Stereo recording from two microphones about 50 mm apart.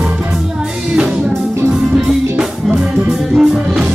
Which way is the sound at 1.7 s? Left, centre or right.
Centre.